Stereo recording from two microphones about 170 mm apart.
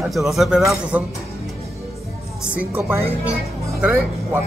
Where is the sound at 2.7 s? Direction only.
10° right (ahead or behind).